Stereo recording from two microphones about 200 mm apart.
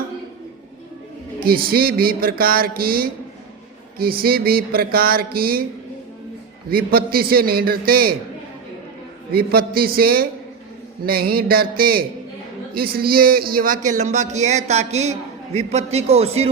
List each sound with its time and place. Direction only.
1.4 s speech: 50° right (ahead or behind)
6.7 s speech: 50° right (ahead or behind)
9.3 s speech: 50° right (ahead or behind); by 16.5 s 30° right (ahead or behind)